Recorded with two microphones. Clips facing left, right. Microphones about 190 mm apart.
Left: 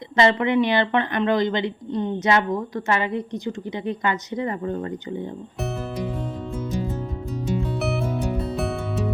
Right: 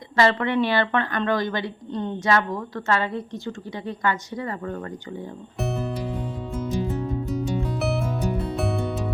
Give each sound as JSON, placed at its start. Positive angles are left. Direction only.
{"t": 0.2, "sound": "a woman's voice", "side_deg": 15}
{"t": 5.5, "sound": "music", "side_deg": 0}
{"t": 7.8, "sound": "music", "side_deg": 0}